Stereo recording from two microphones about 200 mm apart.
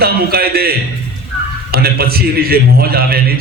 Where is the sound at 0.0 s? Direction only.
50° right (ahead or behind).